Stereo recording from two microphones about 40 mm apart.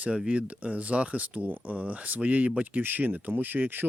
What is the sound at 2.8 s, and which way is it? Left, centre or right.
Speech, right.